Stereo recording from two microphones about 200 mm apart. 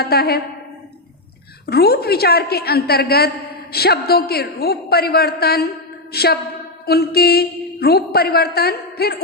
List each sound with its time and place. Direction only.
0.0 s a woman's voice: 50° left (ahead or behind)
1.6 s a woman's voice: 50° left (ahead or behind)